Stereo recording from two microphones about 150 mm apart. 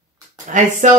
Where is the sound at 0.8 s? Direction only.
55° right (ahead or behind).